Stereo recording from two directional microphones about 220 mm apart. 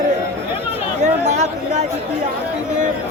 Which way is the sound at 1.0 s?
30° right (ahead or behind).